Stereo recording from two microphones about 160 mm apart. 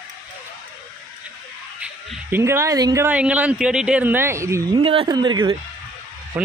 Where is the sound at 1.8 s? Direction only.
10° right (ahead or behind).